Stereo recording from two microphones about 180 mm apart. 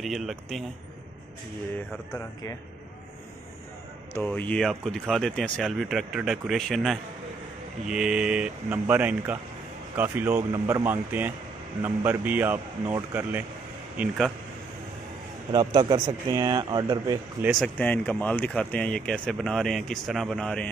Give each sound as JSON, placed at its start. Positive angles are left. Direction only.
{"t": 0.0, "sound": "speech", "side_deg": 0}
{"t": 4.1, "sound": "speech", "side_deg": 10}
{"t": 13.9, "sound": "speech", "side_deg": 0}
{"t": 15.5, "sound": "speech", "side_deg": -25}
{"t": 17.4, "sound": "speech", "side_deg": 0}